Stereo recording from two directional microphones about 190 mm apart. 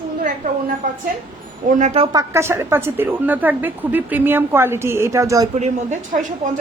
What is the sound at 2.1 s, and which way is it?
Speech, 15° right (ahead or behind).